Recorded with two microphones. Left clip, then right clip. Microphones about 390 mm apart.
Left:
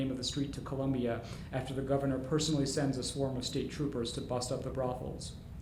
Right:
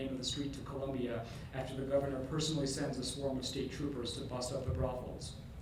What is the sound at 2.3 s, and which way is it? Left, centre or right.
Speech, left.